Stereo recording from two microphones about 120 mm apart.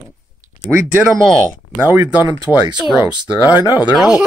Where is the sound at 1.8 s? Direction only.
15° right (ahead or behind).